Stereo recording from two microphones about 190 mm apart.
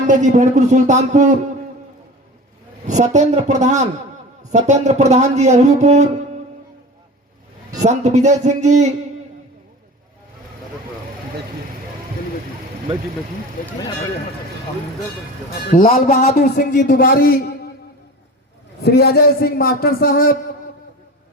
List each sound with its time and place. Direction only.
0.1 s speech: 40° right (ahead or behind)
2.8 s speech: 40° right (ahead or behind)
7.8 s speech: 35° right (ahead or behind)
15.7 s a man's voice: 45° left (ahead or behind)
18.8 s a man's voice: 55° left (ahead or behind)